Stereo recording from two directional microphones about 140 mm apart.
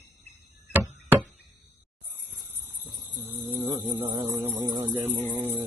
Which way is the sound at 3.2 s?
15° right (ahead or behind).